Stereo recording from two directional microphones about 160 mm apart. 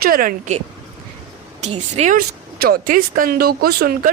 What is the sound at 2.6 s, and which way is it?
Speech, 65° right (ahead or behind).